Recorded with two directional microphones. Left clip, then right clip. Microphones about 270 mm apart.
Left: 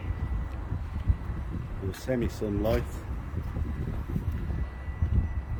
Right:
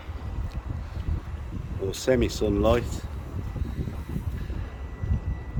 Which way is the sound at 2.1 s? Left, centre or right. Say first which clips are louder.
Right 7 dB; centre.